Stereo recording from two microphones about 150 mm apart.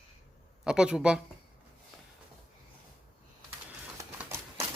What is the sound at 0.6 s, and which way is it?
Speech, 5° right (ahead or behind).